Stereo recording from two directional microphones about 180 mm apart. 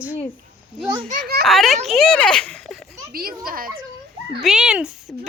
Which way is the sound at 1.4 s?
Centre (ahead or behind).